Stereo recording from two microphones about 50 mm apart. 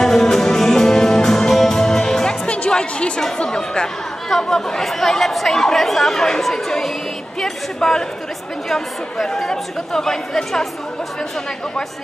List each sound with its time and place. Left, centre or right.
0.0 s music: centre
2.4 s music: left
3.4 s speech: centre
7.3 s a sound: centre
8.6 s speech: centre